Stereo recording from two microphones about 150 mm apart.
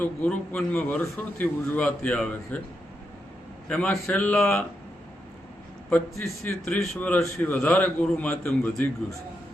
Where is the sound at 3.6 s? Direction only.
5° left (ahead or behind).